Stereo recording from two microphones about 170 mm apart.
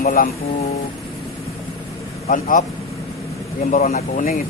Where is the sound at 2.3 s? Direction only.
50° left (ahead or behind).